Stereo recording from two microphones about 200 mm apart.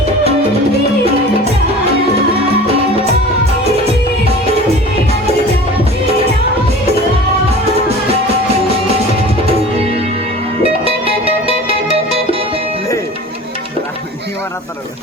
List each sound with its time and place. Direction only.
10.6 s music: 30° right (ahead or behind)